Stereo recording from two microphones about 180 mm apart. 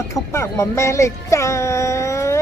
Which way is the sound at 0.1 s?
15° left (ahead or behind).